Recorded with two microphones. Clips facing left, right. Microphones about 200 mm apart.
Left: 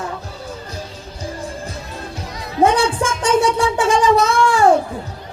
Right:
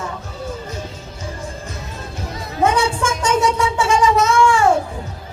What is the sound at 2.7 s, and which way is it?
Speech, 35° left (ahead or behind).